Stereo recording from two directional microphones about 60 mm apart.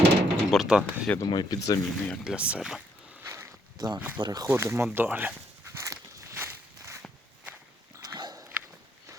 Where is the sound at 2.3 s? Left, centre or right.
Centre.